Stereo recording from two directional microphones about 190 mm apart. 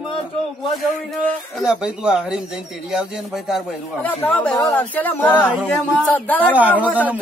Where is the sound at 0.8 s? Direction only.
Centre (ahead or behind).